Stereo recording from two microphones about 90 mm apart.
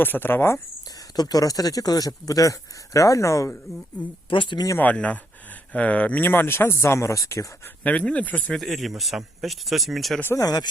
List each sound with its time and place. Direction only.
0.0 s speech: 25° left (ahead or behind)
1.1 s speech: 45° left (ahead or behind)
4.3 s speech: 70° left (ahead or behind)
4.8 s speech: 15° left (ahead or behind); by 7.7 s 35° left (ahead or behind)
7.9 s speech: 15° left (ahead or behind)
8.5 s speech: centre (ahead or behind)
10.3 s speech: 40° left (ahead or behind)